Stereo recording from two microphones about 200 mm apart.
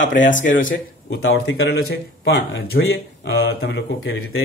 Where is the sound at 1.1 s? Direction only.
70° left (ahead or behind).